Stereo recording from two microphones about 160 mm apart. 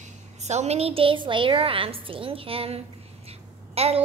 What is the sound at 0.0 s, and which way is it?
A woman's voice, 45° right (ahead or behind).